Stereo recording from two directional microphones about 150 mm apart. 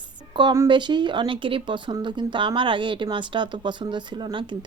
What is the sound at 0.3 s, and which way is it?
Speech, 25° right (ahead or behind).